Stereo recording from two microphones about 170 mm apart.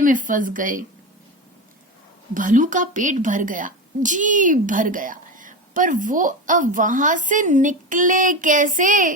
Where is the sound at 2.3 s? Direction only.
50° right (ahead or behind).